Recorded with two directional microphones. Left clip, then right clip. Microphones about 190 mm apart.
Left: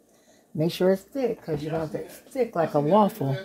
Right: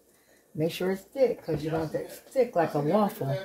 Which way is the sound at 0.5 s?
40° left (ahead or behind).